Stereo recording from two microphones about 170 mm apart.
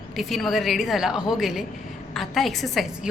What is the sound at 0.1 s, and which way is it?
A woman's voice, centre (ahead or behind).